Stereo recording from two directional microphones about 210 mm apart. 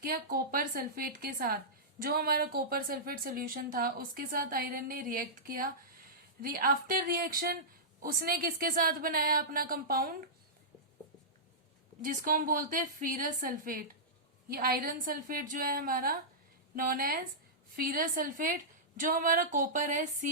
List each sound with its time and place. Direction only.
0.0 s a woman's voice: 45° right (ahead or behind)
12.0 s a woman's voice: 40° right (ahead or behind)